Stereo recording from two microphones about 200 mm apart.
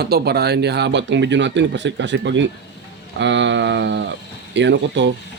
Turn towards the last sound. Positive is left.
turn(degrees=-60)  # may be behind; listen again after turning